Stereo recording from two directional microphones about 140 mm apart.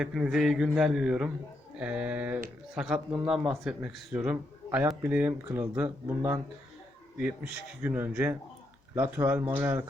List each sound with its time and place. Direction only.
0.0 s a man's voice: 5° right (ahead or behind)